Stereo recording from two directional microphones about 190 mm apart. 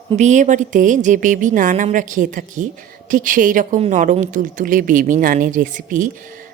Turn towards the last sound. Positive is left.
turn(degrees=-45)  # may be behind; listen again after turning